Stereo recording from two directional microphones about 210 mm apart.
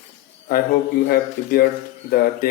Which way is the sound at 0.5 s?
50° left (ahead or behind).